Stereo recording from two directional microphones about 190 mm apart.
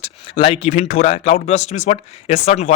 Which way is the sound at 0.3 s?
30° left (ahead or behind).